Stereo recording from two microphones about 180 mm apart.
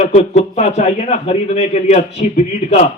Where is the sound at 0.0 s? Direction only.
40° left (ahead or behind).